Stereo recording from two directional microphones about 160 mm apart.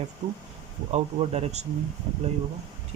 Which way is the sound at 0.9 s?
45° right (ahead or behind).